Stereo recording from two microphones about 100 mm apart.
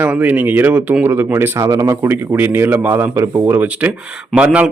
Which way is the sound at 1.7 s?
35° right (ahead or behind).